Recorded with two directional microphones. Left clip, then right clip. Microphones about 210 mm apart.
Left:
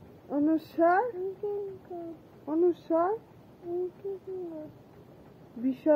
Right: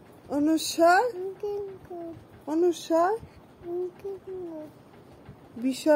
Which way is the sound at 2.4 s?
20° right (ahead or behind).